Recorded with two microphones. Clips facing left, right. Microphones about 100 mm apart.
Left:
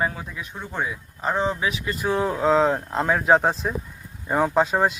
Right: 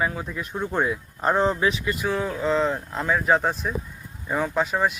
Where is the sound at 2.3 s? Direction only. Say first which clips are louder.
Left 6 dB; 45° left (ahead or behind).